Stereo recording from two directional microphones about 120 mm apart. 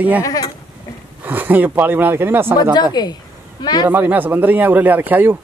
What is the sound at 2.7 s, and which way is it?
Speech, 35° left (ahead or behind).